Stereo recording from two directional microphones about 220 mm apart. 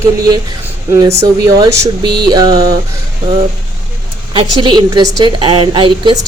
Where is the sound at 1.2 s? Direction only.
15° right (ahead or behind).